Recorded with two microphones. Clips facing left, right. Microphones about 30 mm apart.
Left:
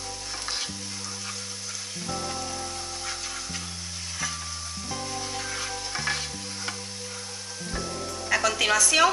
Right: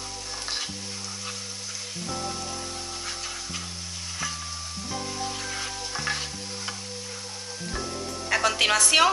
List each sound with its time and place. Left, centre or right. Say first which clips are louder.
2.0 s music: even; centre
4.9 s stir: right 1 dB; centre
8.3 s music: even; right
8.7 s a woman's voice: even; right